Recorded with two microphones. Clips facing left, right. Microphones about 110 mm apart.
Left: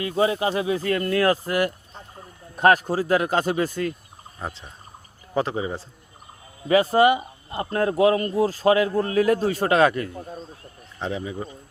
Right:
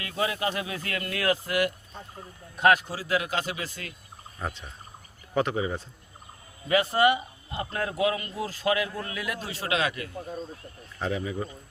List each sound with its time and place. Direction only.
0.0 s speech: 30° left (ahead or behind); by 3.8 s 45° left (ahead or behind)
4.4 s speech: 25° left (ahead or behind); by 10.1 s 45° left (ahead or behind)
11.0 s speech: 25° left (ahead or behind)